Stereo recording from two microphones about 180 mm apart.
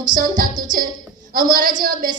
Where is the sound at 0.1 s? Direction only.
50° right (ahead or behind).